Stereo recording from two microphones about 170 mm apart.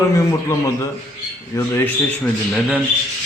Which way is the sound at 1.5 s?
10° left (ahead or behind).